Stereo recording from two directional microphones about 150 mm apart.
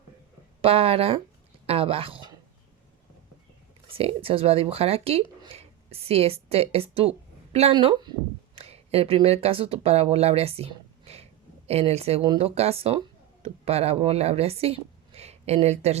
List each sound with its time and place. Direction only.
0.6 s speech: 40° right (ahead or behind)
3.9 s speech: 40° right (ahead or behind)